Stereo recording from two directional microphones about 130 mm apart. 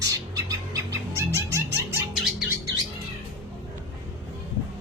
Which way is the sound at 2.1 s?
5° right (ahead or behind).